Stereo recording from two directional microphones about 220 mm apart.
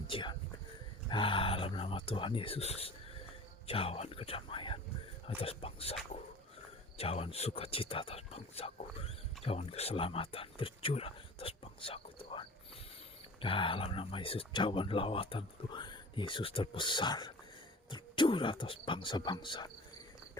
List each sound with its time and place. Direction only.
0.1 s speech: 20° left (ahead or behind)